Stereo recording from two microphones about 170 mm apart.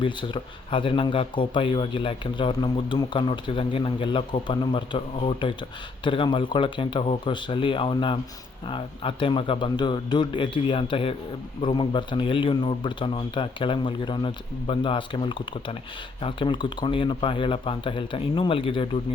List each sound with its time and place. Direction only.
0.0 s speech: 30° left (ahead or behind)